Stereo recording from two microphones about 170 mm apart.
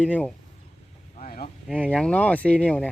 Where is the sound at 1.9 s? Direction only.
5° left (ahead or behind).